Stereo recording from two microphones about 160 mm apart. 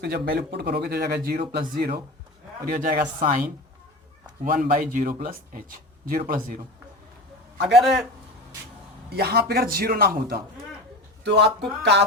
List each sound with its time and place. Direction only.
0.0 s speech: 80° right; by 3.1 s 65° right (ahead or behind)
3.2 s a woman's voice: 50° right (ahead or behind)
4.4 s speech: 55° right (ahead or behind)
7.8 s a man's voice: centre (ahead or behind)
9.0 s speech: 80° right
11.2 s speech: 90° right